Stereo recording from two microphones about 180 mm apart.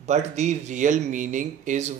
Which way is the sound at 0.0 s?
40° right (ahead or behind).